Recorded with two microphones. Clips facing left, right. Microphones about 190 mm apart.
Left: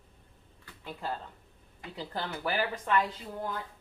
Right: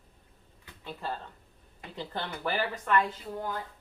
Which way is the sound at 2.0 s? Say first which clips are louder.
Even; 5° left (ahead or behind).